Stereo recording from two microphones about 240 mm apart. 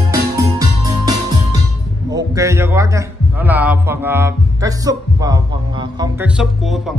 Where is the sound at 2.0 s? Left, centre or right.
Centre.